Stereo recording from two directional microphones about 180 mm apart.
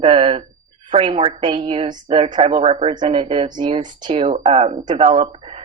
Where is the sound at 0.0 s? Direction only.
30° right (ahead or behind).